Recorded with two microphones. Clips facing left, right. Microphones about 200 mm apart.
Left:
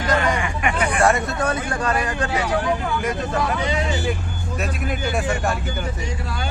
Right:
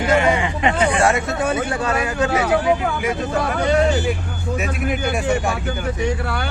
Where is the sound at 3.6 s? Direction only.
60° right (ahead or behind).